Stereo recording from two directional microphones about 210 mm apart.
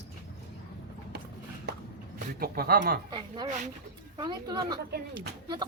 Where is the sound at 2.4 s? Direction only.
45° right (ahead or behind).